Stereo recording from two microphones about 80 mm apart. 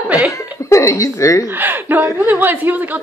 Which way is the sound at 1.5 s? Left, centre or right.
Right.